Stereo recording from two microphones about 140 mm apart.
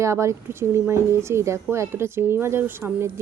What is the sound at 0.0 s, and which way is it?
A woman's voice, 20° right (ahead or behind).